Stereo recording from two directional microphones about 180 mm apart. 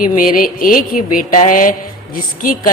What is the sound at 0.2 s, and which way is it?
Speech, 50° left (ahead or behind).